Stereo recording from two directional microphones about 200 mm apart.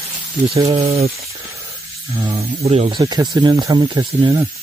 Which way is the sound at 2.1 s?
20° right (ahead or behind).